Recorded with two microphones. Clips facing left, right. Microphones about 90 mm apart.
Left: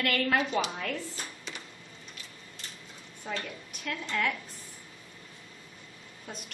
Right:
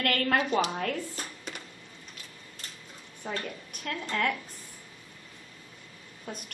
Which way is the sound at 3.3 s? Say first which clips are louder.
Right 1 dB; 45° right (ahead or behind).